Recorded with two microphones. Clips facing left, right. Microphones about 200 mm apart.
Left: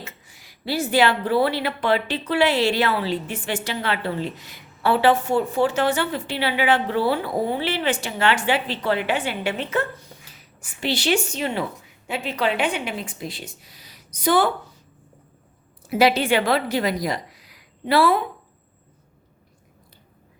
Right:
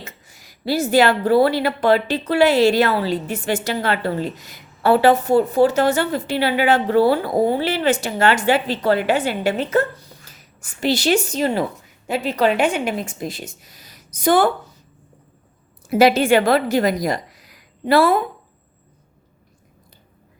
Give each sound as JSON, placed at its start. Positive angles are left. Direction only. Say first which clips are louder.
{"t": 0.0, "sound": "speech", "louder": "right 1 dB", "side_deg": -40}
{"t": 15.9, "sound": "a woman's voice", "louder": "right 5 dB", "side_deg": -45}